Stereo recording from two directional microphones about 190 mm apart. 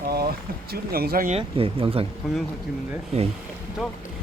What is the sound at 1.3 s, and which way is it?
Speech, 30° right (ahead or behind).